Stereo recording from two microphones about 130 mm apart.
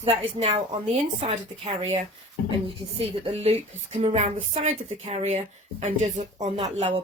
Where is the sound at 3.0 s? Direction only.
45° right (ahead or behind); by 6.5 s 65° right (ahead or behind).